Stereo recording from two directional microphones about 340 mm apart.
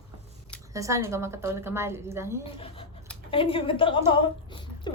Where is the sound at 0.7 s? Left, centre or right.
Centre.